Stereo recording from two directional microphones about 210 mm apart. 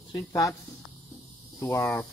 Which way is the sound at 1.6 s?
15° left (ahead or behind).